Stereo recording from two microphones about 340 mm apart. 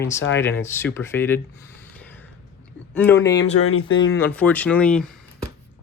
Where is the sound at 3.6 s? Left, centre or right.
Left.